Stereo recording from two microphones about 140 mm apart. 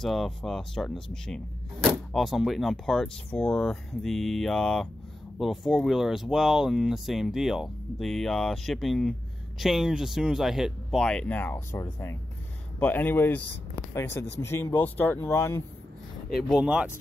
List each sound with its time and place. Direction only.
0.0 s speech: centre (ahead or behind); by 15.6 s 20° left (ahead or behind)
16.5 s speech: 10° right (ahead or behind)